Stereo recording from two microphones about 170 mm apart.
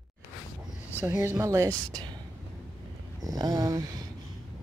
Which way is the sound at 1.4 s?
15° right (ahead or behind).